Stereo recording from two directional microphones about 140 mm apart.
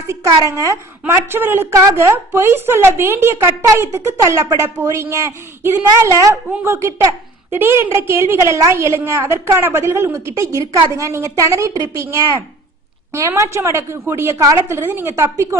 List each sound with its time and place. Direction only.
0.1 s a woman's voice: 20° right (ahead or behind)
13.1 s a woman's voice: 20° right (ahead or behind)